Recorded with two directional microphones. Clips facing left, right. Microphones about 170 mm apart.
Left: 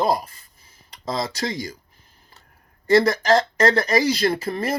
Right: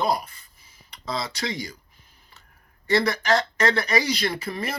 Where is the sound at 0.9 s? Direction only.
45° left (ahead or behind).